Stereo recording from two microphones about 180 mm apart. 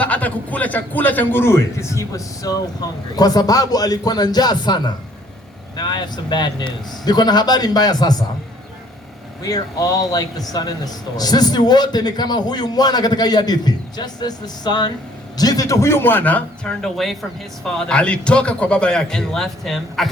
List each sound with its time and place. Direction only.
0.0 s a man's voice: 10° left (ahead or behind)
9.4 s a man's voice: 20° left (ahead or behind); by 20.1 s centre (ahead or behind)